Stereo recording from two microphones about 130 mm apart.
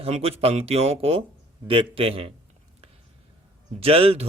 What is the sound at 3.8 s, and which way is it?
Speech, 50° right (ahead or behind).